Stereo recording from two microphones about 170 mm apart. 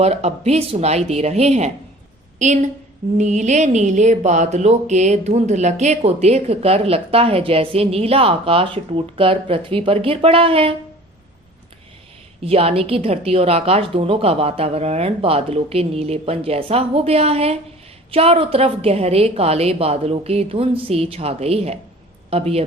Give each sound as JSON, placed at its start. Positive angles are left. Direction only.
{"t": 0.0, "sound": "a woman's voice", "side_deg": -40}
{"t": 12.4, "sound": "speech", "side_deg": -35}